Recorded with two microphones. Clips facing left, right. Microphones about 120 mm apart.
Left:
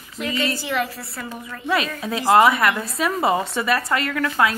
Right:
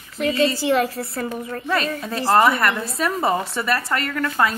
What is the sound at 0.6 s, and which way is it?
Speech, 35° right (ahead or behind).